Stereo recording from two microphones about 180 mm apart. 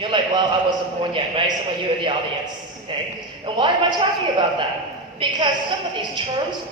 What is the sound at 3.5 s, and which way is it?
Speech, 25° right (ahead or behind).